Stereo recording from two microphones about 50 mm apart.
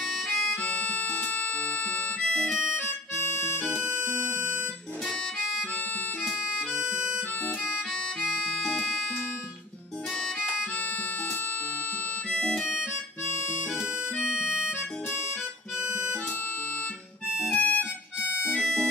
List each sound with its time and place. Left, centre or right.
0.0 s music: centre
0.6 s harmonica: left
1.2 s music: left
2.1 s music: centre
2.8 s harmonica: left
6.4 s harmonica: centre
8.5 s music: centre
10.6 s harmonica: left
12.3 s harmonica: centre
12.5 s harmonica: centre
17.5 s music: left
18.2 s harmonica: right
18.5 s music: centre